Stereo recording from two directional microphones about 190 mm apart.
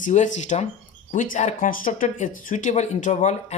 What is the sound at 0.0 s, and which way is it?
Speech, 40° left (ahead or behind).